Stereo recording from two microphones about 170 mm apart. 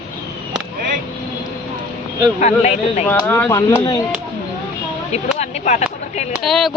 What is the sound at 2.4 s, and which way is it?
Speech, 40° left (ahead or behind).